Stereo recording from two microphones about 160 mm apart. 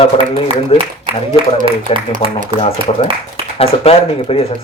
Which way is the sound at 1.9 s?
35° left (ahead or behind).